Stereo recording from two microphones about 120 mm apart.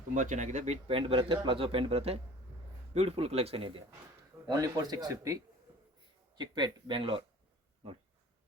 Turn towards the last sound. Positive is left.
turn(degrees=-45)  # may be behind; listen again after turning